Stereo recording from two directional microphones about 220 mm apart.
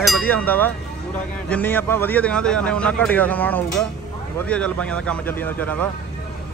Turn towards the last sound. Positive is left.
turn(degrees=5)  # may be behind; listen again after turning